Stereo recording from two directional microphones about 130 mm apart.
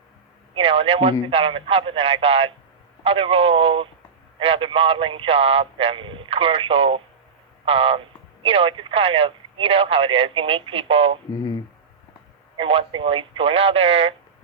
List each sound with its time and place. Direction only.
0.5 s speech: 45° right (ahead or behind)
12.5 s speech: 45° right (ahead or behind)